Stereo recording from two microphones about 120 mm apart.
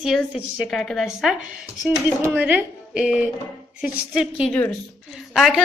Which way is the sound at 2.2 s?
15° right (ahead or behind).